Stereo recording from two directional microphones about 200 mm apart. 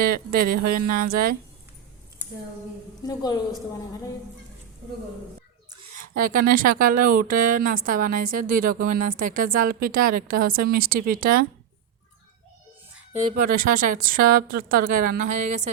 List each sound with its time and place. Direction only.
0.0 s speech: 50° right (ahead or behind)
3.0 s a woman's voice: 20° left (ahead or behind)
6.0 s speech: 45° right (ahead or behind)
13.3 s speech: 45° right (ahead or behind)